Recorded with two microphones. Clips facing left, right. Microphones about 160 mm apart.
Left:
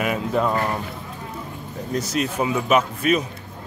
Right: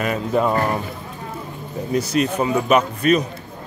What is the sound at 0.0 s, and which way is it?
Speech, 5° left (ahead or behind).